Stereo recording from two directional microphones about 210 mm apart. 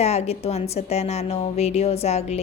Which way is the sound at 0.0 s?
30° left (ahead or behind).